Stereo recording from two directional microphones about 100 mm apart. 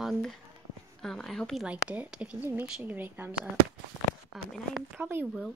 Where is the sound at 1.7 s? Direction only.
10° right (ahead or behind).